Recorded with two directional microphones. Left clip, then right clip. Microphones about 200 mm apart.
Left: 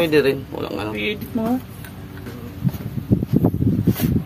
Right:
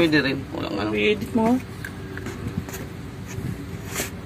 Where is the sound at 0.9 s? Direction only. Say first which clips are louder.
Right 3 dB; 5° right (ahead or behind).